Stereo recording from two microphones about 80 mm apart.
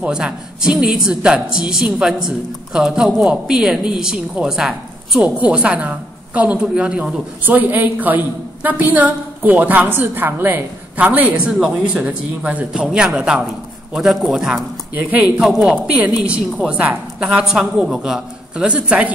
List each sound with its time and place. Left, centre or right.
0.0 s speech: centre
5.2 s speech: centre
7.4 s a woman's voice: right
11.3 s speech: centre
15.0 s a woman's voice: centre